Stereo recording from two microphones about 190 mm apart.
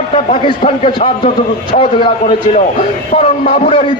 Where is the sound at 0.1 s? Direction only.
30° left (ahead or behind).